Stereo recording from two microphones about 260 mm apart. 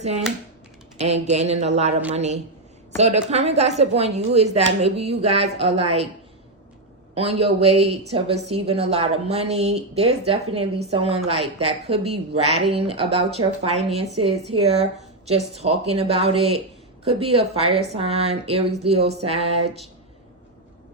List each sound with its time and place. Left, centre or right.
0.9 s speech: right
7.1 s speech: right